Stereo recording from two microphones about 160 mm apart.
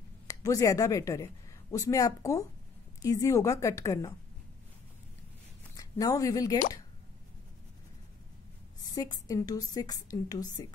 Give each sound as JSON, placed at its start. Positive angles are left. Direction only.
{"t": 0.3, "sound": "a woman's voice", "side_deg": 20}
{"t": 5.8, "sound": "speech", "side_deg": 20}
{"t": 8.8, "sound": "a woman's voice", "side_deg": 25}